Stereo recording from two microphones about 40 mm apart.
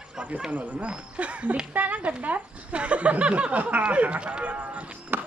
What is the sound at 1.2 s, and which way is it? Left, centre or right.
A woman's voice, right.